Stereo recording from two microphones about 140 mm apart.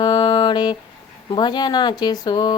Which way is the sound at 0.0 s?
35° left (ahead or behind).